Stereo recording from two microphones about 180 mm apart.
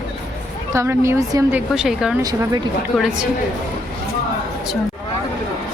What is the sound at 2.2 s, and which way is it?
Speech, 20° right (ahead or behind).